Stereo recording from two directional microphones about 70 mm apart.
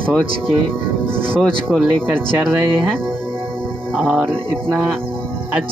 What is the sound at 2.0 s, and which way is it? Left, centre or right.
Speech, centre.